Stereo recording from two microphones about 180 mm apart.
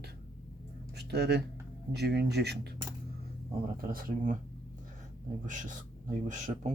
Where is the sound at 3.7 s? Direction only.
55° right (ahead or behind).